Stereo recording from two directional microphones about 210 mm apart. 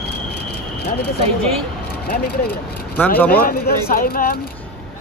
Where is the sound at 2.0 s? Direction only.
45° left (ahead or behind).